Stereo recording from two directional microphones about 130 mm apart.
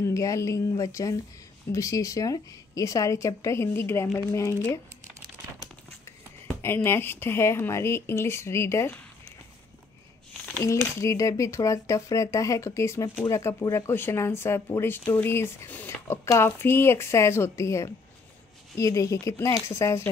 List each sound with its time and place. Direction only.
0.0 s speech: 25° left (ahead or behind)
6.6 s speech: 20° left (ahead or behind)
10.6 s speech: 20° left (ahead or behind)